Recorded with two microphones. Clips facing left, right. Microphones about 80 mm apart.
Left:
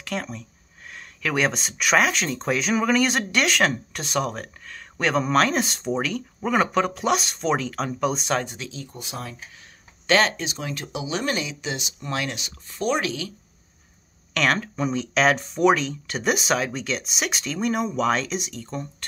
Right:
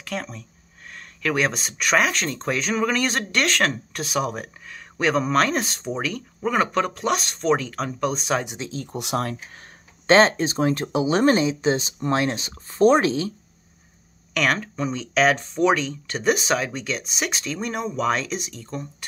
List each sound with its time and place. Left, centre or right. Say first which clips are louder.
0.0 s speech: left 1 dB; centre
8.6 s speech: right 4 dB; right
8.9 s speech: right 9 dB; right
10.0 s speech: right 5 dB; right
14.3 s speech: even; centre